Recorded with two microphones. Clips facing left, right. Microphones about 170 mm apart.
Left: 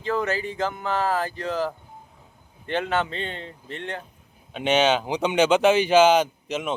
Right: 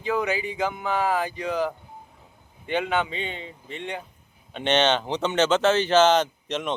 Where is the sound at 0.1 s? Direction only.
Centre (ahead or behind).